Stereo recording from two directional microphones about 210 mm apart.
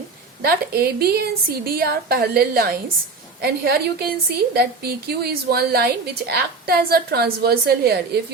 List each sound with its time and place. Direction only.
0.4 s a woman's voice: 50° right (ahead or behind)